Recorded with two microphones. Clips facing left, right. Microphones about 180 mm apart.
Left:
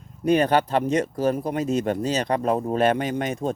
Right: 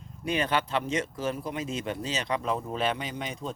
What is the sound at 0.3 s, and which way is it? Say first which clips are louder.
Speech: left 9 dB; 40° left (ahead or behind).